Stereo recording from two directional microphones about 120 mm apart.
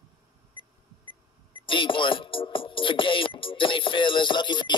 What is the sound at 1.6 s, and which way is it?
Music, 45° left (ahead or behind).